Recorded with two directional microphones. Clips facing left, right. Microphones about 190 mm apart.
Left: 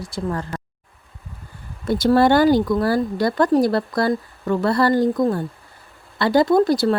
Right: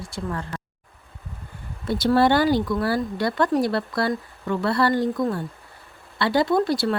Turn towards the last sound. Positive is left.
turn(degrees=40)  # may be behind; listen again after turning